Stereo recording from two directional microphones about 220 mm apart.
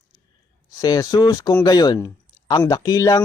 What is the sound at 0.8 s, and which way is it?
Speech, 15° left (ahead or behind).